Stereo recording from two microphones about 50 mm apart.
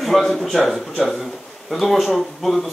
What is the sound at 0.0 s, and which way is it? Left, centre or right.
A man's voice, centre.